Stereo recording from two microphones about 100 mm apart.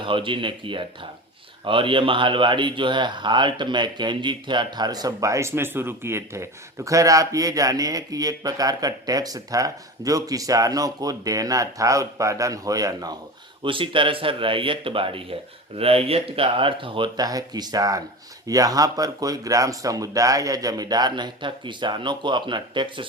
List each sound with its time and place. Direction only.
0.0 s speech: 60° right (ahead or behind); by 13.1 s 40° right (ahead or behind)
13.7 s speech: 60° right (ahead or behind)
17.2 s speech: 40° right (ahead or behind)